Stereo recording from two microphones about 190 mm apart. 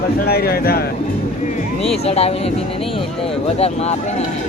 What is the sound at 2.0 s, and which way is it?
Speech, 35° left (ahead or behind).